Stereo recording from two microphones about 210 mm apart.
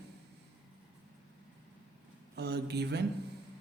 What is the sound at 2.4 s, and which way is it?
Speech, 50° right (ahead or behind).